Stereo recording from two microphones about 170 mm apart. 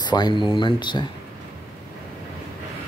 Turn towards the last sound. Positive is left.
turn(degrees=25)  # may be behind; listen again after turning